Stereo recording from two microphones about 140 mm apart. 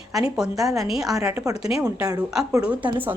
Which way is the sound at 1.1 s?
15° right (ahead or behind).